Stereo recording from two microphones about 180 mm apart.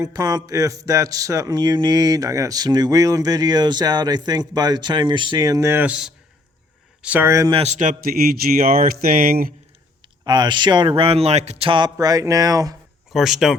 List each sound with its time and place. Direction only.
0.0 s speech: 20° right (ahead or behind)
7.5 s speech: 35° right (ahead or behind); by 9.5 s 55° right (ahead or behind)
10.2 s speech: 25° right (ahead or behind)
13.1 s speech: centre (ahead or behind)